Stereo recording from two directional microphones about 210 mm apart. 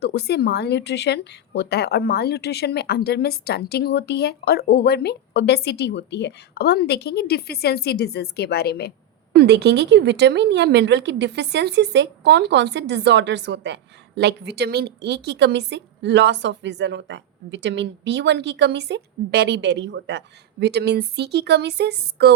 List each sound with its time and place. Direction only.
0.0 s speech: 50° left (ahead or behind)
9.3 s a woman's voice: 50° right (ahead or behind)